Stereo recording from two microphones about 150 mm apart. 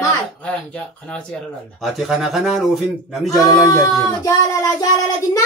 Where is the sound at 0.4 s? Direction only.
10° left (ahead or behind).